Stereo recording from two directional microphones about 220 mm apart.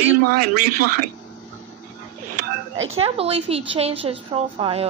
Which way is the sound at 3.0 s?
25° right (ahead or behind).